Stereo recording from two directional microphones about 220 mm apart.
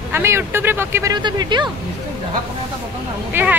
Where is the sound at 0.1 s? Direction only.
10° right (ahead or behind).